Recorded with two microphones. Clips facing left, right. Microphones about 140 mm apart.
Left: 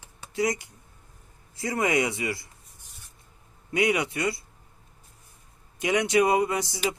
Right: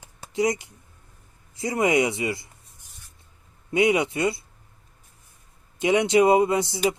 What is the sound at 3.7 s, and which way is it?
Speech, 25° right (ahead or behind).